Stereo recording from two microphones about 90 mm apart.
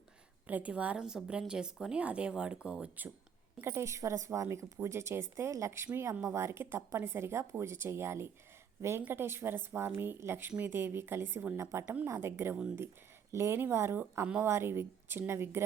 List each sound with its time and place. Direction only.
0.4 s a woman's voice: 15° right (ahead or behind)
3.6 s speech: 30° right (ahead or behind)
14.0 s a woman's voice: 15° right (ahead or behind)
14.4 s speech: 30° right (ahead or behind)